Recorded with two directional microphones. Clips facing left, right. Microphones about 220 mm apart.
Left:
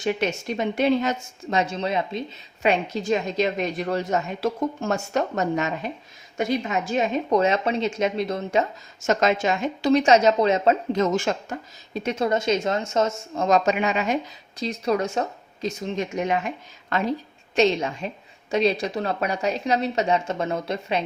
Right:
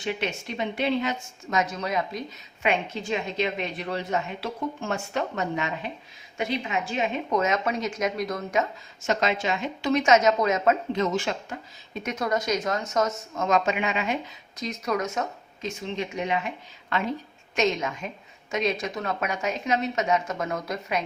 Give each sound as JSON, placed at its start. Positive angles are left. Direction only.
{"t": 0.0, "sound": "a woman's voice", "side_deg": 45}
{"t": 1.5, "sound": "speech", "side_deg": 30}
{"t": 2.6, "sound": "a woman's voice", "side_deg": 40}
{"t": 9.0, "sound": "a woman's voice", "side_deg": 45}
{"t": 9.9, "sound": "a woman's voice", "side_deg": 35}
{"t": 10.9, "sound": "a woman's voice", "side_deg": 45}
{"t": 11.9, "sound": "speech", "side_deg": 30}
{"t": 14.6, "sound": "a woman's voice", "side_deg": 30}